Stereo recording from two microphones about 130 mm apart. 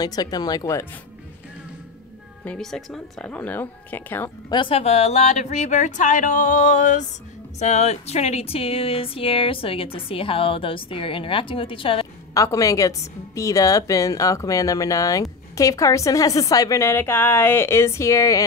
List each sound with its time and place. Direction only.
0.0 s speech: 30° left (ahead or behind)
2.4 s speech: 5° left (ahead or behind)
4.5 s speech: 35° left (ahead or behind)
4.7 s a sound: 55° left (ahead or behind); by 7.1 s 75° left (ahead or behind)
7.5 s speech: 60° left (ahead or behind); by 12.1 s 45° left (ahead or behind)
12.4 s a woman's voice: 25° left (ahead or behind)